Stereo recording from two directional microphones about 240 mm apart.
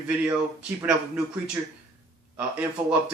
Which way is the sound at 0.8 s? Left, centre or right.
Centre.